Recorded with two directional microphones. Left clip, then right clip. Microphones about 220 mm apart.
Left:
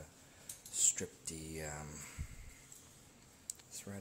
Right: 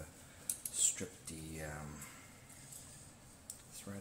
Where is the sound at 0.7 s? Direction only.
35° left (ahead or behind).